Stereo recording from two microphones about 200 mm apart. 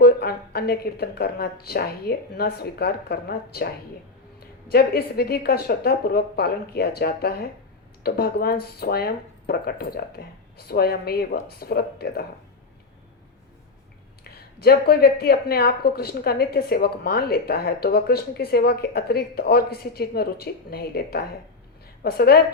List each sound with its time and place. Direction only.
0.0 s speech: 50° left (ahead or behind)
14.3 s speech: 50° left (ahead or behind)